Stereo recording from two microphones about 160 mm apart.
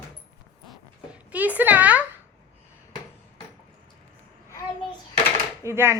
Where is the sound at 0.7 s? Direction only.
10° right (ahead or behind).